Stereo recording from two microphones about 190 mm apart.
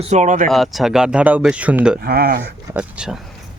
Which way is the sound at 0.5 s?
Centre (ahead or behind).